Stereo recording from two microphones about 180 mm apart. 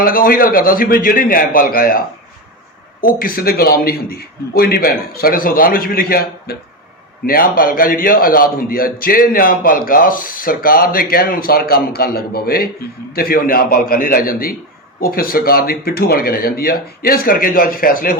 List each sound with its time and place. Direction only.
0.0 s a man's voice: 50° left (ahead or behind)